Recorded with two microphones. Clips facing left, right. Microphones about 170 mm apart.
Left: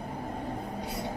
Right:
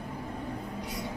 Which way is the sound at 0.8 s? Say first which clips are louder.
Left 2 dB; 30° left (ahead or behind).